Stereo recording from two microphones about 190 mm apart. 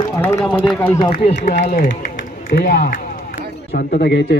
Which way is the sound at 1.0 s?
30° left (ahead or behind).